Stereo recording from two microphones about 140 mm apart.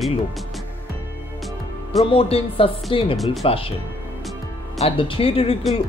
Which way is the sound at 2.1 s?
45° left (ahead or behind).